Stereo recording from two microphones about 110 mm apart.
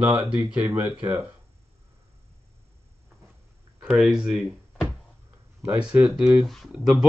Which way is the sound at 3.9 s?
5° right (ahead or behind).